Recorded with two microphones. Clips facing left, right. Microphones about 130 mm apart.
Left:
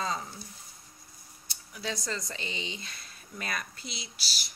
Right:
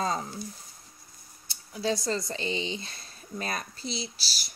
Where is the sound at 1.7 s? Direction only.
30° right (ahead or behind).